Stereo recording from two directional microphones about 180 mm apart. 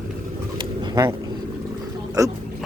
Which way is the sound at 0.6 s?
20° right (ahead or behind).